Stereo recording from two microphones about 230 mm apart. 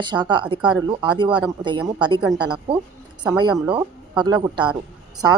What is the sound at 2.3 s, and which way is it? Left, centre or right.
Speech, centre.